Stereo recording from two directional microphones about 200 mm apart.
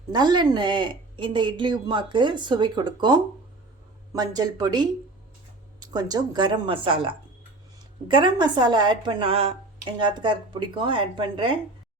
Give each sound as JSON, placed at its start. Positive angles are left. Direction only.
{"t": 0.1, "sound": "a woman's voice", "side_deg": -20}